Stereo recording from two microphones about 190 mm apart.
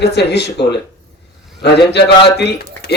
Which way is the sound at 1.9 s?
60° left (ahead or behind).